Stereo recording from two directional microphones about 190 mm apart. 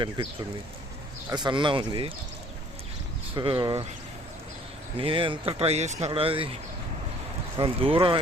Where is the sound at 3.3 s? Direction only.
25° right (ahead or behind).